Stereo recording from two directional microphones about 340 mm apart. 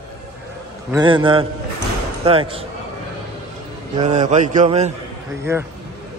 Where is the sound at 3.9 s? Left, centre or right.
Right.